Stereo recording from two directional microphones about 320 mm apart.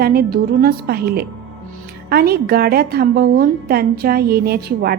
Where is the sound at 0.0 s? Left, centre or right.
Right.